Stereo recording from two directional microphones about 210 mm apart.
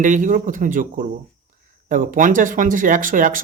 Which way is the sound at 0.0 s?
40° right (ahead or behind).